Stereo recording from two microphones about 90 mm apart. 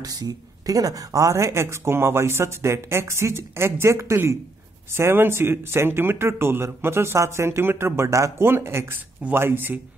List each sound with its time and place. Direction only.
0.0 s speech: 45° right (ahead or behind); by 9.8 s 25° right (ahead or behind)